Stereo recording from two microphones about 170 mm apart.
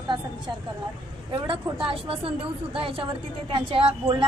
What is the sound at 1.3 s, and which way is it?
A woman's voice, 30° right (ahead or behind).